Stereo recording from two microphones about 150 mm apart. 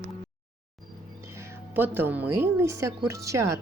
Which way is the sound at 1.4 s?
15° right (ahead or behind).